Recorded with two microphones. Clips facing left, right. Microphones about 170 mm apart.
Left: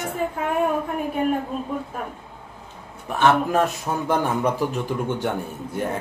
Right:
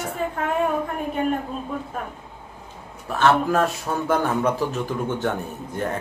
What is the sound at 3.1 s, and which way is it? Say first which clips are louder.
Speech: even; 20° left (ahead or behind).